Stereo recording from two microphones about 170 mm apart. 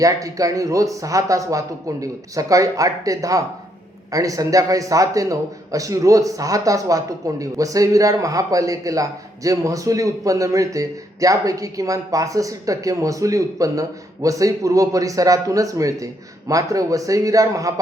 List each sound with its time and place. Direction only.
0.0 s a man's voice: 20° right (ahead or behind)